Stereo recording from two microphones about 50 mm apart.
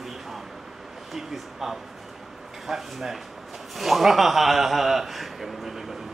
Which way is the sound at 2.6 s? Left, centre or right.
Centre.